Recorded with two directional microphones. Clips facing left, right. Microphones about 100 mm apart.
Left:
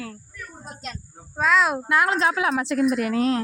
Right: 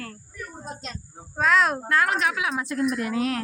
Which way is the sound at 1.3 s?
Centre (ahead or behind).